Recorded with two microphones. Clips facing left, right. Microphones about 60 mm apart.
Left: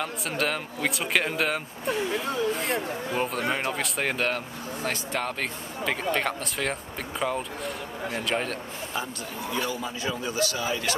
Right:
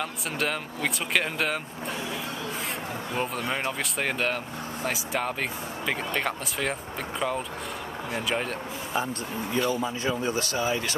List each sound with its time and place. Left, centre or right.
0.0 s speech: centre
3.2 s speech: centre
9.5 s speech: right